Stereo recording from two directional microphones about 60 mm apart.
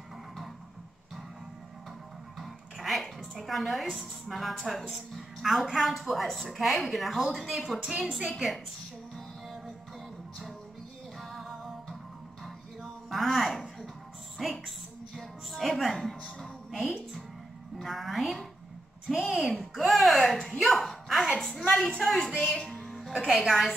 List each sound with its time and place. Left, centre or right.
2.3 s a woman's voice: centre
7.8 s a woman's voice: centre
11.1 s music: centre
12.4 s a sound: centre
14.4 s music: centre
19.0 s a sound: centre
22.7 s music: centre